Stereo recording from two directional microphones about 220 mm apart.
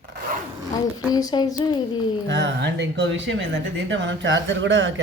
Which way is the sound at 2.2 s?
55° right (ahead or behind).